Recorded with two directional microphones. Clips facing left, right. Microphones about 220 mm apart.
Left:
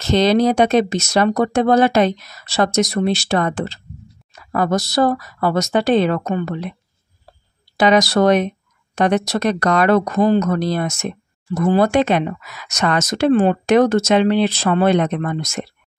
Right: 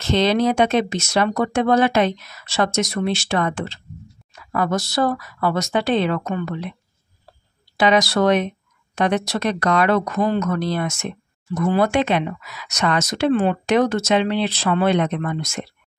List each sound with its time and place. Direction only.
0.0 s speech: 40° left (ahead or behind)
7.7 s speech: 40° left (ahead or behind)